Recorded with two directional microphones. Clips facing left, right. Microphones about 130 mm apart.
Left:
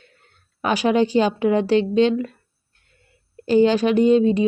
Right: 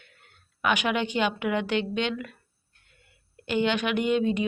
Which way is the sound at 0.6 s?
35° left (ahead or behind).